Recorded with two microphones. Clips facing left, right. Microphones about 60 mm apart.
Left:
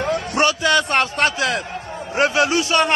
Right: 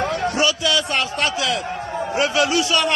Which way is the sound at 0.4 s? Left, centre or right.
Left.